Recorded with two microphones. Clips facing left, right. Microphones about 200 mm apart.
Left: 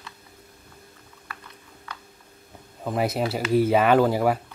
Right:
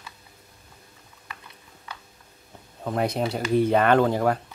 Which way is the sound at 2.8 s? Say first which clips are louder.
Even; 5° left (ahead or behind).